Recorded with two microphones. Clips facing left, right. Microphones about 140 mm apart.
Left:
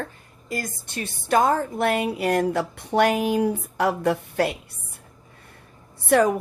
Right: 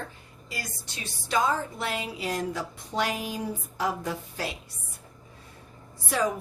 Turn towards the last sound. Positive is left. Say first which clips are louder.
# left 9 dB
turn(degrees=60)  # may be behind; listen again after turning